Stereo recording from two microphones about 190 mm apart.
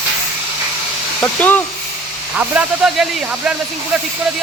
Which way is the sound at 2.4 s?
5° right (ahead or behind).